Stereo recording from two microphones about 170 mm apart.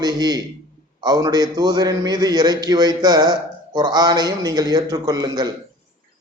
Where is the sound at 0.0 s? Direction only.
25° right (ahead or behind).